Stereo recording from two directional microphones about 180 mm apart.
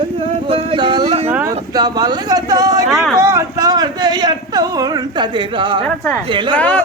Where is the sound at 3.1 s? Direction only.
15° right (ahead or behind).